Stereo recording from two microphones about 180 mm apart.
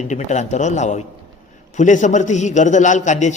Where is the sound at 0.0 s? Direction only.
40° left (ahead or behind).